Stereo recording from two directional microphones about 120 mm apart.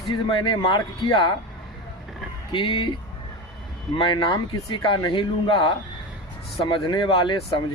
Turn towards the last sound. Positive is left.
turn(degrees=40)  # may be behind; listen again after turning